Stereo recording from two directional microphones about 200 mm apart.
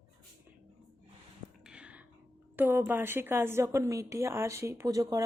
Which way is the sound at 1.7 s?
5° right (ahead or behind).